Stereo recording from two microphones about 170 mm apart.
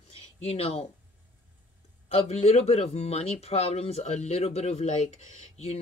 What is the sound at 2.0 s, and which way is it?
Speech, 35° left (ahead or behind).